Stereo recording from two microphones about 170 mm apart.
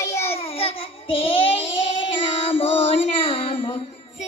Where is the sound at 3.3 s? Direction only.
35° left (ahead or behind).